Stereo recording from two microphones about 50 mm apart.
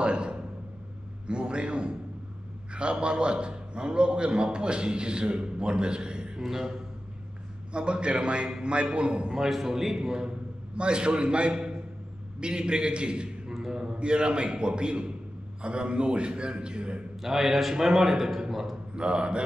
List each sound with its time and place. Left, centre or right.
0.0 s a sound: centre
1.2 s a man's voice: centre
7.7 s a man's voice: right
9.3 s a man's voice: centre
17.2 s a man's voice: centre
18.9 s a man's voice: centre